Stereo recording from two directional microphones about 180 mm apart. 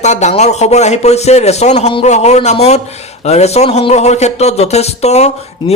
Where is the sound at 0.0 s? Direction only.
40° left (ahead or behind).